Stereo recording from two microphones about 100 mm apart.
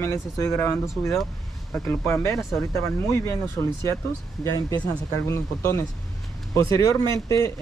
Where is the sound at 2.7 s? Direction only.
25° left (ahead or behind).